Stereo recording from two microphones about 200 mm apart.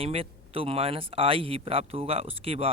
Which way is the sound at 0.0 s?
30° right (ahead or behind).